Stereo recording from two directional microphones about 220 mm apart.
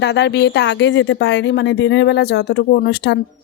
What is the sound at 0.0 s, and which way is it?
A woman's voice, 50° left (ahead or behind).